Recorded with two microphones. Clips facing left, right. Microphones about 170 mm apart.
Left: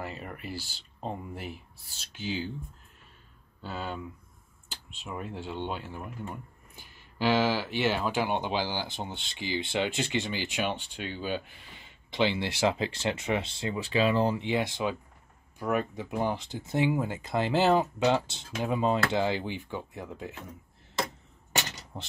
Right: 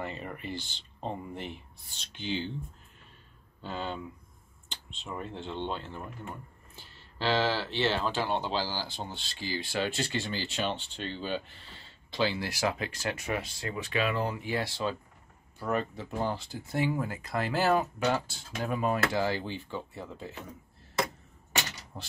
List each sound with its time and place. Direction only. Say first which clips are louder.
0.0 s speech: right 1 dB; 5° left (ahead or behind)
3.6 s speech: even; 5° left (ahead or behind)
21.9 s speech: left 3 dB; 20° left (ahead or behind)